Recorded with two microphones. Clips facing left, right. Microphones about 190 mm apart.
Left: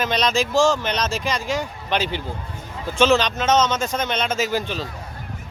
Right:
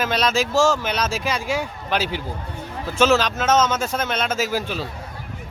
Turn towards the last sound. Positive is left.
turn(degrees=-5)  # may be behind; listen again after turning